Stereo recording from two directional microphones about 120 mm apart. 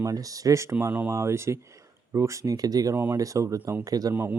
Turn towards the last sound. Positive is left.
turn(degrees=-30)  # may be behind; listen again after turning